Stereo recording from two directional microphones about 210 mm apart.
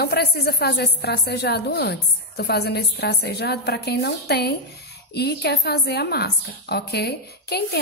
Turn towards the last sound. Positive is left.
turn(degrees=50)  # may be behind; listen again after turning